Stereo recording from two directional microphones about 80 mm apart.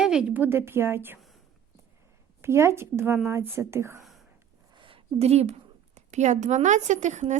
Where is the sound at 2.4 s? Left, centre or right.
Right.